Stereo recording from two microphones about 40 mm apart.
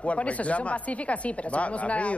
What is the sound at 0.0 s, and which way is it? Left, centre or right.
Speech, left.